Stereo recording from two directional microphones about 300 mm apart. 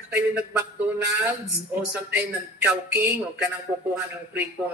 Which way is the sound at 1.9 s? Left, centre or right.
Centre.